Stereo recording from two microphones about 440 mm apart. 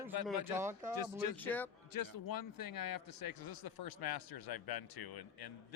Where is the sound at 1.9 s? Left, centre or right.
Left.